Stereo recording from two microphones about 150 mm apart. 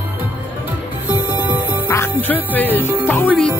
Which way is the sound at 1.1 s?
10° right (ahead or behind).